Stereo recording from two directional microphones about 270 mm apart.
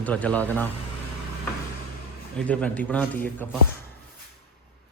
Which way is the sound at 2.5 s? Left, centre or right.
Centre.